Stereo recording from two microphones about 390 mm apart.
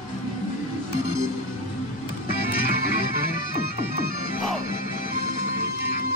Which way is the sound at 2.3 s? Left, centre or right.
Left.